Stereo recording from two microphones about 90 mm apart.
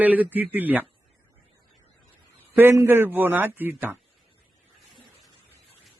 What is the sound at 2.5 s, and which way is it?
Speech, 30° right (ahead or behind).